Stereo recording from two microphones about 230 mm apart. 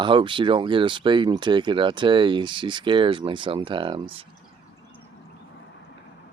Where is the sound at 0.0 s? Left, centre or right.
Right.